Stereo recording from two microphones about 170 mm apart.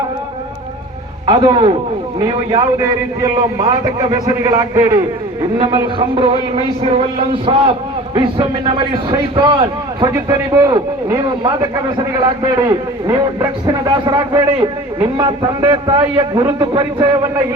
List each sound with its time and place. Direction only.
1.3 s a man's voice: 25° right (ahead or behind)
5.7 s a man's voice: 30° right (ahead or behind)
7.5 s a man's voice: 30° right (ahead or behind)